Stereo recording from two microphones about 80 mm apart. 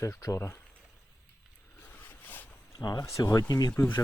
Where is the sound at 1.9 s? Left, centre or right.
Left.